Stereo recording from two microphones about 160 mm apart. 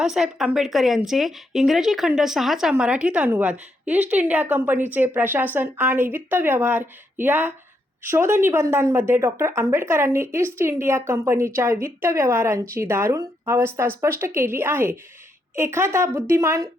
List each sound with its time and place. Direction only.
0.0 s a woman's voice: 5° right (ahead or behind); by 16.6 s 20° right (ahead or behind)